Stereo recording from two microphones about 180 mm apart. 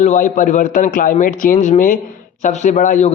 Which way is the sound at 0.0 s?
40° left (ahead or behind).